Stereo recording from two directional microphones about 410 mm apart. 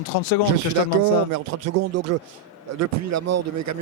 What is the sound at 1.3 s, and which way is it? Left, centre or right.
Speech, right.